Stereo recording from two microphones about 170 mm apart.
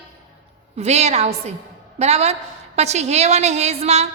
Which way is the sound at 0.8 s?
40° right (ahead or behind).